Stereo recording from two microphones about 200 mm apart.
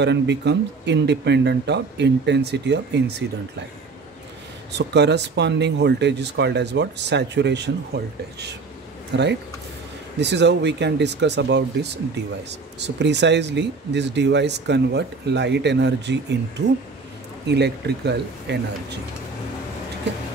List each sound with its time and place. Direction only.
0.0 s speech: 60° right (ahead or behind)
4.7 s speech: 60° right (ahead or behind)
17.5 s speech: 55° right (ahead or behind)